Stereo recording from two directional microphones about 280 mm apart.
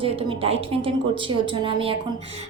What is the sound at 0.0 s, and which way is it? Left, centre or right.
A woman's voice, centre.